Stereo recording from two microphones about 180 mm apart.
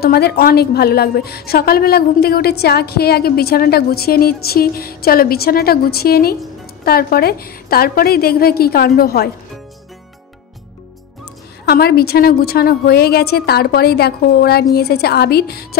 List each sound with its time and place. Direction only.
0.0 s a woman's voice: 60° left (ahead or behind)
11.6 s a woman's voice: 60° left (ahead or behind)